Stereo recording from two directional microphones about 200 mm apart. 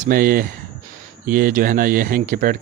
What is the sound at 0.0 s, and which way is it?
Speech, 45° right (ahead or behind).